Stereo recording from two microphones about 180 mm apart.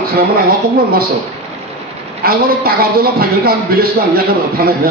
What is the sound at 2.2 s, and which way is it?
A man's voice, 55° right (ahead or behind).